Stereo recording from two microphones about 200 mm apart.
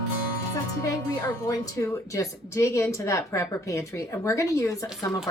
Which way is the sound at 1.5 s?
15° left (ahead or behind).